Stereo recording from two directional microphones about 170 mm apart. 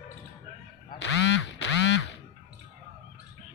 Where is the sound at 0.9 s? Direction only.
90° left.